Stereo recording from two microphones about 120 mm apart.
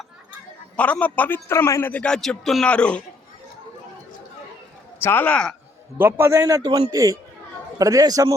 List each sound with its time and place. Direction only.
0.8 s a man's voice: 10° left (ahead or behind)
1.9 s a man's voice: 10° left (ahead or behind)
5.0 s a man's voice: 15° left (ahead or behind)
6.0 s a man's voice: 20° right (ahead or behind)
6.6 s a man's voice: 35° right (ahead or behind)